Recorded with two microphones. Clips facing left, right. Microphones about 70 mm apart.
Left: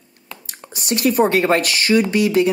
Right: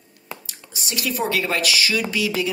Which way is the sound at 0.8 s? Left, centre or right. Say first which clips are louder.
Left 9 dB; left.